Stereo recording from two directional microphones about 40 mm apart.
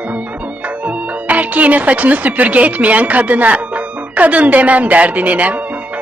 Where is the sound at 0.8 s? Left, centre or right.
Right.